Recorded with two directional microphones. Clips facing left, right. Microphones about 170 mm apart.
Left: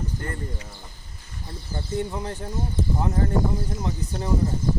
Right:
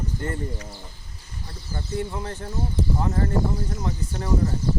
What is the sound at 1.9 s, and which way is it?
Speech, 15° left (ahead or behind).